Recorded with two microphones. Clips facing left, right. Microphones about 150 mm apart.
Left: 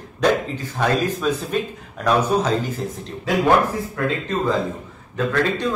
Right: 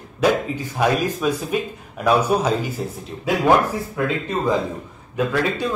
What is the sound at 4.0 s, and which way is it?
Speech, 5° right (ahead or behind).